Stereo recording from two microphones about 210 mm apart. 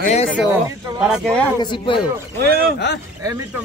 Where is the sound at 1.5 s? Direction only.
25° left (ahead or behind).